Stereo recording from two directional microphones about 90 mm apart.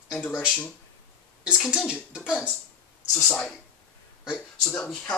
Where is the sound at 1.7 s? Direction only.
10° right (ahead or behind).